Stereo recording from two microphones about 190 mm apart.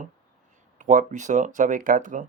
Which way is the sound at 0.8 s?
40° right (ahead or behind).